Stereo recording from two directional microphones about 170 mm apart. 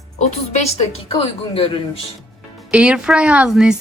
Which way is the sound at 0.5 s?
35° left (ahead or behind).